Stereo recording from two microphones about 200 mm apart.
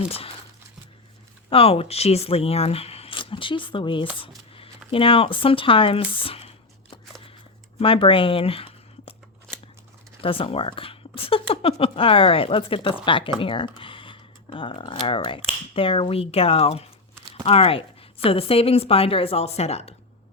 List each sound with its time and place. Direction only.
1.5 s speech: 30° left (ahead or behind)
7.8 s speech: 25° left (ahead or behind)
10.2 s speech: 25° left (ahead or behind)